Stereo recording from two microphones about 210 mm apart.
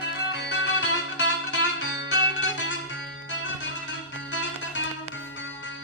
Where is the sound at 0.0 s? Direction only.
55° left (ahead or behind).